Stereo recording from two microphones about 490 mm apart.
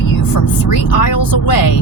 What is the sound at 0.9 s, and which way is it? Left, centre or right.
Speech, left.